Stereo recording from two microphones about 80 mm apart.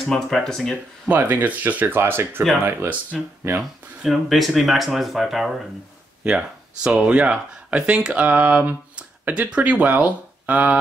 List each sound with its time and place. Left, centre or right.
0.0 s speech: centre
1.0 s speech: right
4.0 s speech: centre